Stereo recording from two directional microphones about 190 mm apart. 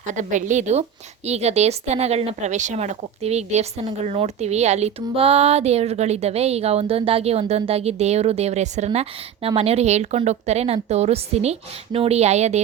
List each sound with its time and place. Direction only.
0.1 s speech: 40° right (ahead or behind)